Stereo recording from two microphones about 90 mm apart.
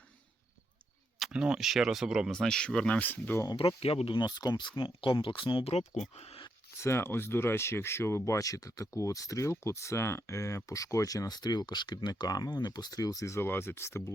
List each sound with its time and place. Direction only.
1.2 s speech: 10° right (ahead or behind)
2.3 s speech: 5° left (ahead or behind)
3.5 s speech: 85° left; by 5.6 s 70° left (ahead or behind)
6.7 s speech: 30° left (ahead or behind)